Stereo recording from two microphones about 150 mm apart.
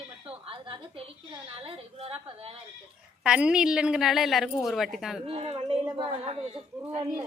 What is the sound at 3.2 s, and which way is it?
A woman's voice, 5° right (ahead or behind).